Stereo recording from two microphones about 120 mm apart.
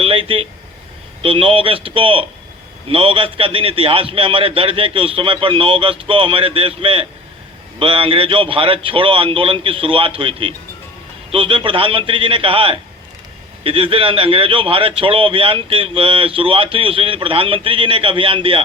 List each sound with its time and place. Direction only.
0.0 s speech: 50° right (ahead or behind)